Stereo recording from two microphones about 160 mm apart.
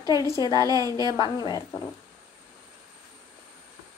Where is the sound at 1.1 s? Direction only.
25° left (ahead or behind).